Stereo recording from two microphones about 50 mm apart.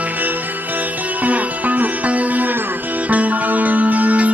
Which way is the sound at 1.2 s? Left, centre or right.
Right.